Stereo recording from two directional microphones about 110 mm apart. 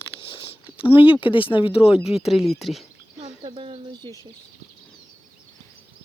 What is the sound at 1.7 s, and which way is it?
Speech, 60° left (ahead or behind).